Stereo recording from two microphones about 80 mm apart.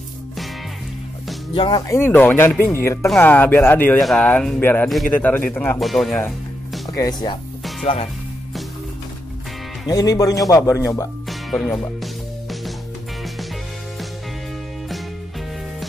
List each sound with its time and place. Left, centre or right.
1.5 s speech: left
1.9 s speech: left
2.7 s speech: left
3.2 s speech: left
4.0 s speech: centre
4.6 s speech: left
4.8 s speech: centre
5.1 s speech: centre
5.8 s speech: centre
6.9 s speech: left
9.8 s speech: left
11.2 s music: centre